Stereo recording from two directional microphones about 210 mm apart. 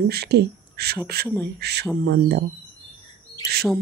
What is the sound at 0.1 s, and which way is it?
Speech, 50° right (ahead or behind).